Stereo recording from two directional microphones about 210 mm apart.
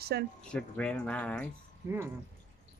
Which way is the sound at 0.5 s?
5° left (ahead or behind).